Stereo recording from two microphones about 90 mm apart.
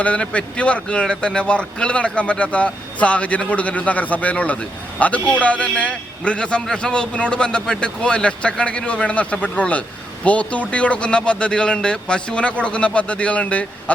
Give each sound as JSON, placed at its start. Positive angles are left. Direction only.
{"t": 0.0, "sound": "speech", "side_deg": 15}